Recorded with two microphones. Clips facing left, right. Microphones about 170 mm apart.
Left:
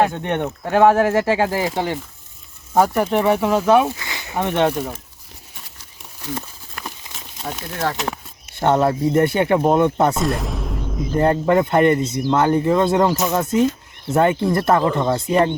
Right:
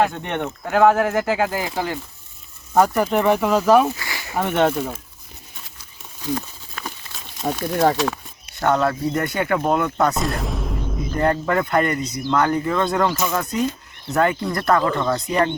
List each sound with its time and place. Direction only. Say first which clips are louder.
0.0 s speech: left 2 dB; 15° left (ahead or behind)
2.7 s speech: even; centre (ahead or behind)
3.9 s a sound: even; 20° left (ahead or behind)
4.4 s speech: left 1 dB; 5° right (ahead or behind)
4.6 s speech: right 1 dB; 10° left (ahead or behind)
7.1 s a sound: left 1 dB; 15° left (ahead or behind)
7.4 s speech: right 5 dB; 30° right (ahead or behind)
8.5 s speech: left 2 dB; 25° left (ahead or behind)
10.2 s a sound: left 2 dB; centre (ahead or behind)
11.1 s speech: left 4 dB; 25° left (ahead or behind)